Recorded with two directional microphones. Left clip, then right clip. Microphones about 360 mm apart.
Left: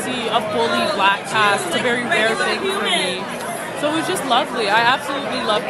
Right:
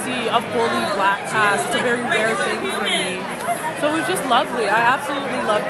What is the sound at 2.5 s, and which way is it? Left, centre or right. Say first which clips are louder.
Speech: left 2 dB; centre.